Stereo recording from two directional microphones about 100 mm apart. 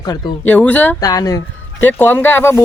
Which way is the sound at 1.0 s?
40° left (ahead or behind).